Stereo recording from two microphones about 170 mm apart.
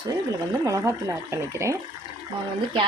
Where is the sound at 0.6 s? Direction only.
20° right (ahead or behind).